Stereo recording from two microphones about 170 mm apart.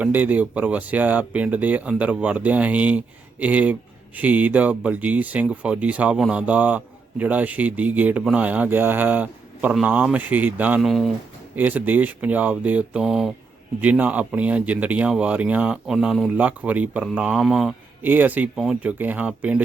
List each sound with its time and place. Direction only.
0.0 s speech: 10° right (ahead or behind)